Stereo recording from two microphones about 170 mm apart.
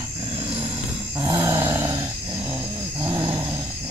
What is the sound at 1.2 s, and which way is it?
Dog, 20° right (ahead or behind).